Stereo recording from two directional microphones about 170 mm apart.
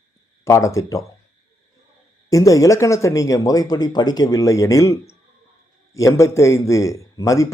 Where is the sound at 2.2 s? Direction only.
20° left (ahead or behind).